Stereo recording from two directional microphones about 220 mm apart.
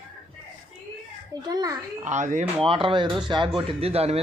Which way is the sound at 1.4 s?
15° right (ahead or behind).